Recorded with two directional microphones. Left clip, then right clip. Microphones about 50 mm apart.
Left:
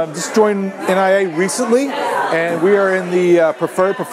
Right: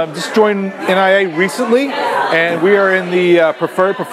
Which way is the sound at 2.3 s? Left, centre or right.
Left.